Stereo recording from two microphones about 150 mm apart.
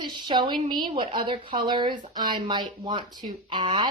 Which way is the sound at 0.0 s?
30° right (ahead or behind).